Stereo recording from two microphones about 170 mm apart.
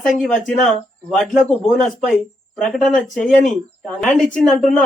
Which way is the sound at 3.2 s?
Centre (ahead or behind).